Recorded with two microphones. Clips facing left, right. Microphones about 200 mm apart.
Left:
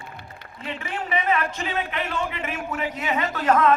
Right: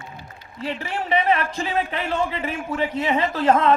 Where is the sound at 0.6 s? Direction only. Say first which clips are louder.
Right 4 dB; 35° right (ahead or behind).